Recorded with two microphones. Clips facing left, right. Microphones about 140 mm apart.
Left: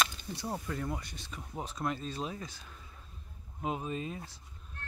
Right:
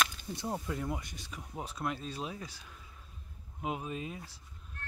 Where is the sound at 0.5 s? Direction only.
10° right (ahead or behind).